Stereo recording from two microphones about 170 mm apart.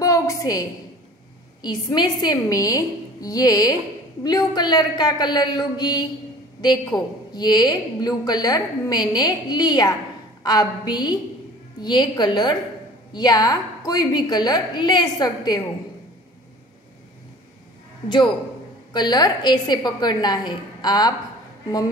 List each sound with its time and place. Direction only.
0.0 s a sound: 20° left (ahead or behind)
1.6 s a woman's voice: 25° left (ahead or behind)
18.0 s a woman's voice: 30° left (ahead or behind)